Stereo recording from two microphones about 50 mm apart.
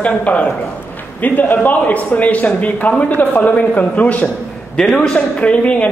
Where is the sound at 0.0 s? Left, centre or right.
Left.